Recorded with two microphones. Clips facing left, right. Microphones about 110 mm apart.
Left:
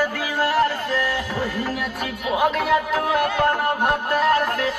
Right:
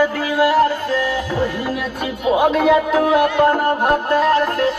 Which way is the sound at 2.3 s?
25° right (ahead or behind).